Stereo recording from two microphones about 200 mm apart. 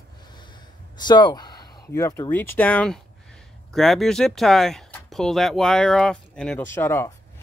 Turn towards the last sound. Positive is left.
turn(degrees=10)  # may be behind; listen again after turning